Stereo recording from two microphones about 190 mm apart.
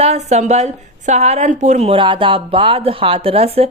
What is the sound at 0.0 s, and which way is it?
A woman's voice, 35° right (ahead or behind).